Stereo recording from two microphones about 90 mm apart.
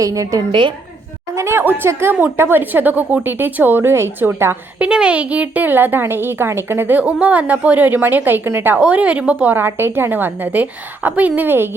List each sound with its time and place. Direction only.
0.0 s a woman's voice: 40° right (ahead or behind)
1.4 s a woman's voice: 25° right (ahead or behind)
4.8 s a woman's voice: 10° right (ahead or behind)